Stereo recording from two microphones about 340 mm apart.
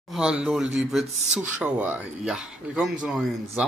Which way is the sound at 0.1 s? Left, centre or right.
Centre.